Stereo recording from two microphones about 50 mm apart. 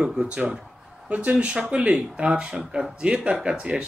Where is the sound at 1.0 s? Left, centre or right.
Right.